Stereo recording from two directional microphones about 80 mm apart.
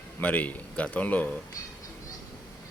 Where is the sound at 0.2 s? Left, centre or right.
Centre.